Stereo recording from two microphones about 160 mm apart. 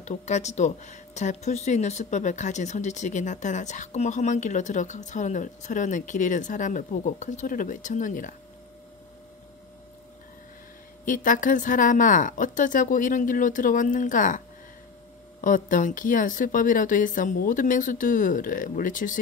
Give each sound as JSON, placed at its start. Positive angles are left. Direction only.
{"t": 0.0, "sound": "speech", "side_deg": 45}
{"t": 11.1, "sound": "a woman's voice", "side_deg": 55}
{"t": 15.4, "sound": "a woman's voice", "side_deg": 55}